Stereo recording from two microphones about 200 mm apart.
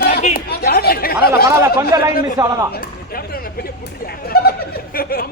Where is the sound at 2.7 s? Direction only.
50° left (ahead or behind).